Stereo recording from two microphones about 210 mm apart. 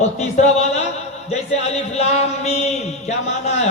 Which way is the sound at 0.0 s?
30° left (ahead or behind).